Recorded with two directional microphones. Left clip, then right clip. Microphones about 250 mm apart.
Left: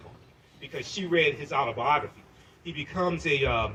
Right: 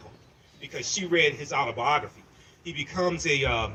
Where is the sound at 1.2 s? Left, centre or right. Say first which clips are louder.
Even; right.